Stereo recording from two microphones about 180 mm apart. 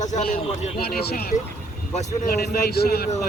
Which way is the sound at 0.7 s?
60° left (ahead or behind).